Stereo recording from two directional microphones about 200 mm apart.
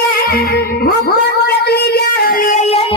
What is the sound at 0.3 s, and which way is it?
Music, 50° left (ahead or behind).